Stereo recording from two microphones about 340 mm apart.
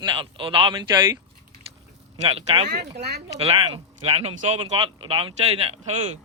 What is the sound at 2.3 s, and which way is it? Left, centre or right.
Speech, centre.